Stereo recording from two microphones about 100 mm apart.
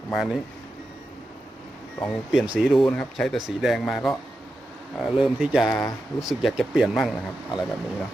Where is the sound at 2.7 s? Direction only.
5° left (ahead or behind).